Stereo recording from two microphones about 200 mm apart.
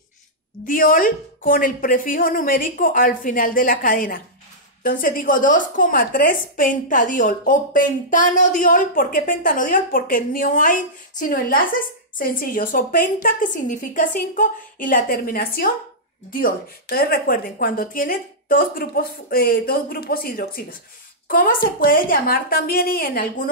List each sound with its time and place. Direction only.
0.7 s a woman's voice: 45° left (ahead or behind)